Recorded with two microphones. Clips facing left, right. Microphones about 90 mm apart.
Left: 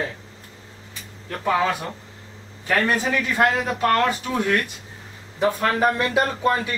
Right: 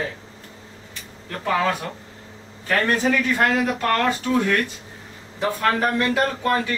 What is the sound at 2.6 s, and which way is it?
Music, 10° left (ahead or behind).